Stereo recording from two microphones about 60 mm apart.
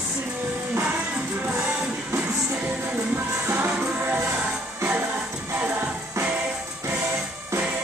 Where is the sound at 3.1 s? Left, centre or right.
Right.